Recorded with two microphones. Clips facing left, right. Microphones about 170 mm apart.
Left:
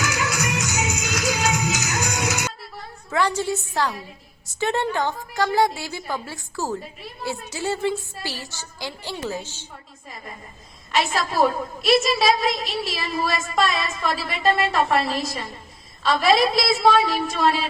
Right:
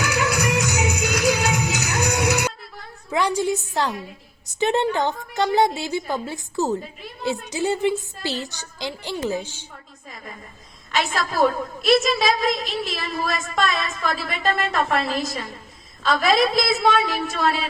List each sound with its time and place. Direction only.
0.7 s music: 60° right (ahead or behind)
3.1 s a woman's voice: 15° right (ahead or behind)
10.9 s a woman's voice: centre (ahead or behind)